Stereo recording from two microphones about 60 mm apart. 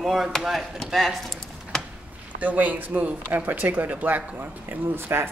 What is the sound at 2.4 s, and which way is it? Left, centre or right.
Speech, right.